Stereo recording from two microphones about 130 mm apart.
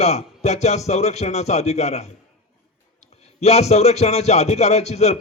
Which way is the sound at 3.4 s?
55° left (ahead or behind).